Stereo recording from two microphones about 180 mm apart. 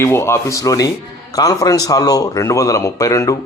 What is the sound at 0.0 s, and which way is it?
Speech, 15° left (ahead or behind).